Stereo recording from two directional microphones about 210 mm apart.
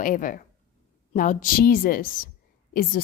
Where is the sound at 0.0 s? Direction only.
40° left (ahead or behind).